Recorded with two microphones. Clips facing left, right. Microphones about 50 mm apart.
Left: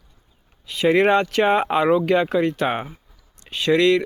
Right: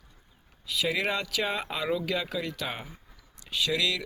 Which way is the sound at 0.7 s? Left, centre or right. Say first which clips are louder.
Left 12 dB; left.